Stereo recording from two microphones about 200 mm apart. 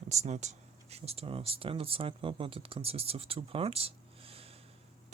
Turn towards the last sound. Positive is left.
turn(degrees=-30)  # may be behind; listen again after turning